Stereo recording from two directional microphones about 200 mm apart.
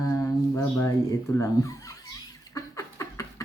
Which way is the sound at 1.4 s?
15° left (ahead or behind).